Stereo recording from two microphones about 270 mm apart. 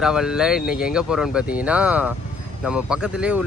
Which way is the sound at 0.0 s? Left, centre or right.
Centre.